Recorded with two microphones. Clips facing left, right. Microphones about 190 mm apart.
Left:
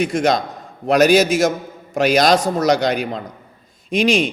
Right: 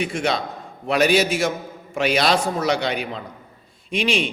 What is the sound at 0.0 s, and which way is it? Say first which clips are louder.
A man's voice: left 6 dB; 40° left (ahead or behind).